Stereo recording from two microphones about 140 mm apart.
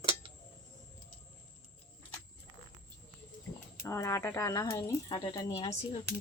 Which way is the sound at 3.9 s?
20° left (ahead or behind).